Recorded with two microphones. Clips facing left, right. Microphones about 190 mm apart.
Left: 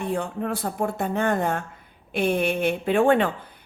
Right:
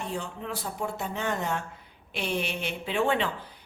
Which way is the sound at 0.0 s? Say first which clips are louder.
Left 8 dB; 55° left (ahead or behind).